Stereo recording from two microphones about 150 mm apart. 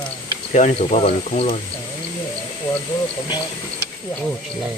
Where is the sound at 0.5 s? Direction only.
50° left (ahead or behind).